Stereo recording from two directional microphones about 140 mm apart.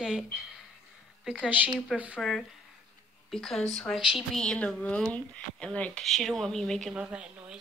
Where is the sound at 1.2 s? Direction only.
5° right (ahead or behind).